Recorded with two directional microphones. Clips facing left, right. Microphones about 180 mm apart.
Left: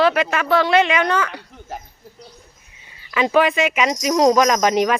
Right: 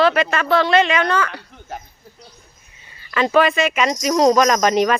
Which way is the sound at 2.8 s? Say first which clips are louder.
Even; 10° left (ahead or behind).